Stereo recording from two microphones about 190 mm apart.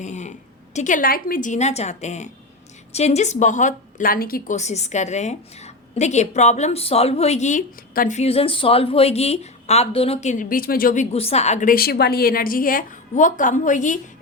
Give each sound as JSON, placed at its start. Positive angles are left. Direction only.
{"t": 0.0, "sound": "a woman's voice", "side_deg": 40}